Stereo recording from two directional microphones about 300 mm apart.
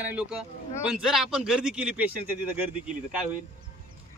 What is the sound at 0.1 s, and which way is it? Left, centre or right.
A man's voice, centre.